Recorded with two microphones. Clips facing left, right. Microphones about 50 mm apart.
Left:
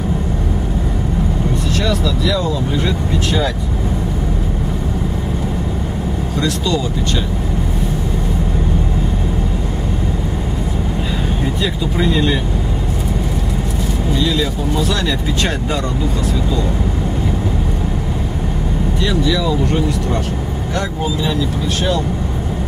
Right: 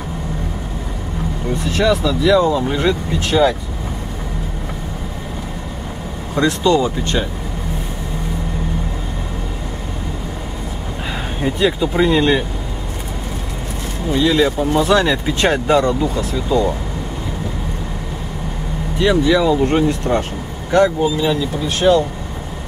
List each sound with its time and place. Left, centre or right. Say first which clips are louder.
1.8 s speech: right 6 dB; right
3.3 s speech: right 7 dB; centre
6.3 s speech: right 5 dB; right
11.6 s speech: right 5 dB; right
14.1 s speech: right 5 dB; right
18.9 s speech: right 5 dB; right